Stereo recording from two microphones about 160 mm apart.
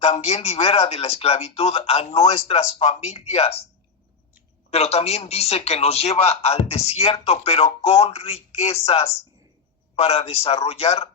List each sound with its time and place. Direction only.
0.0 s speech: 40° left (ahead or behind)
4.7 s speech: 40° left (ahead or behind)
9.9 s speech: 40° left (ahead or behind)